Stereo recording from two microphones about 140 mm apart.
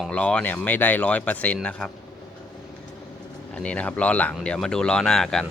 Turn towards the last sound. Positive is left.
turn(degrees=5)  # may be behind; listen again after turning